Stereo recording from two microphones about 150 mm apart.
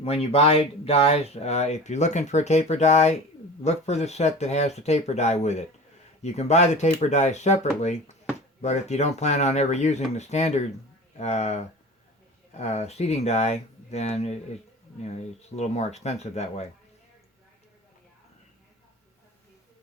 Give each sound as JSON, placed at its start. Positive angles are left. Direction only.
{"t": 0.0, "sound": "speech", "side_deg": 40}